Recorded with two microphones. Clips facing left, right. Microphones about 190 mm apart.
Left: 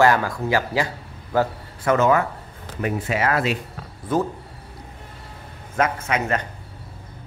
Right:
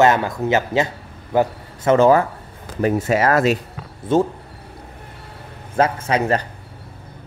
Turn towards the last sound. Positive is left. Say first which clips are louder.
# right 4 dB
turn(degrees=-35)  # may be behind; listen again after turning